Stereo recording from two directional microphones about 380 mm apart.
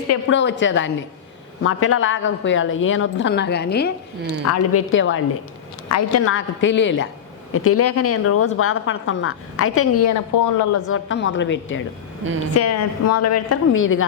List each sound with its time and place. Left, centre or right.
0.1 s a woman's voice: left
10.1 s speech: left
10.8 s a woman's voice: left
12.5 s speech: left